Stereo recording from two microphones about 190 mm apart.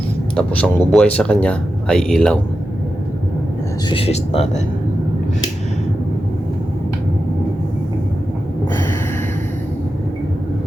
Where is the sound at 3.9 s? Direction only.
30° left (ahead or behind).